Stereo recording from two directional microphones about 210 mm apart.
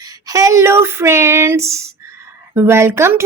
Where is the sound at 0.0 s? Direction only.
15° right (ahead or behind).